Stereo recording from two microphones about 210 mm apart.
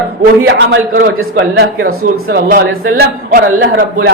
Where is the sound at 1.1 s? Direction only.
80° right.